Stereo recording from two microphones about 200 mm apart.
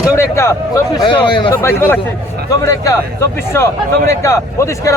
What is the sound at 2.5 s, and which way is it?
A man's voice, 15° left (ahead or behind).